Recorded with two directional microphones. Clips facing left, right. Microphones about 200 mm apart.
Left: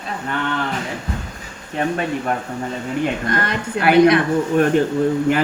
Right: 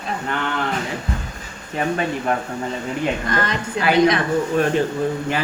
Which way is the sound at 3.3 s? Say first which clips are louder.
Left 1 dB; 55° left (ahead or behind).